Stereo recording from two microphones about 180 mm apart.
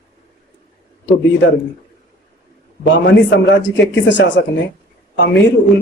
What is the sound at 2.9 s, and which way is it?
A man's voice, 85° left.